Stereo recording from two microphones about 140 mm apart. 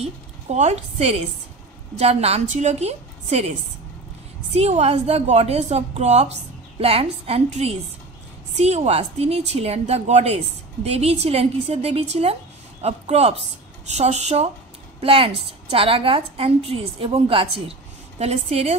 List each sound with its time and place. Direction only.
0.0 s a woman's voice: 50° right (ahead or behind)
4.6 s a woman's voice: 50° right (ahead or behind)
8.5 s a woman's voice: 50° right (ahead or behind)